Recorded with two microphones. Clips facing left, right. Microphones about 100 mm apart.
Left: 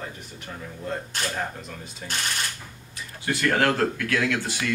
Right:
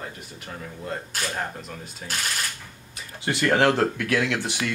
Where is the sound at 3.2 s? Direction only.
25° right (ahead or behind).